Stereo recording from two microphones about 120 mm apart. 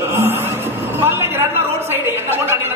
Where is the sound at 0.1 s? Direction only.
20° right (ahead or behind).